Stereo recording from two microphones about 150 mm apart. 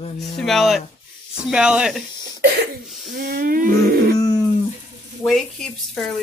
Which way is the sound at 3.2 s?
75° right (ahead or behind).